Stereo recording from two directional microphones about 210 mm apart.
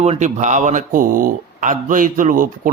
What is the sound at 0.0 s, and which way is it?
Speech, 30° right (ahead or behind).